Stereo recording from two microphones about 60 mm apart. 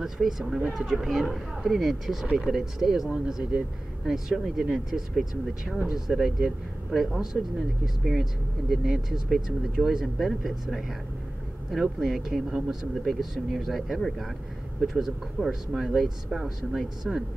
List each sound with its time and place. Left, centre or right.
0.0 s speech: centre